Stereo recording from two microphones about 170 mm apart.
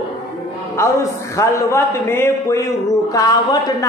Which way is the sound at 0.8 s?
15° left (ahead or behind).